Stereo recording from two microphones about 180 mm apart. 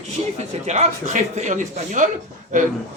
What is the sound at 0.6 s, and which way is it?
Speech, 40° right (ahead or behind).